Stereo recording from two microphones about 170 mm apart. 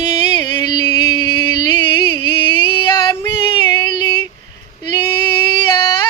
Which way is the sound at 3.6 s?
25° left (ahead or behind).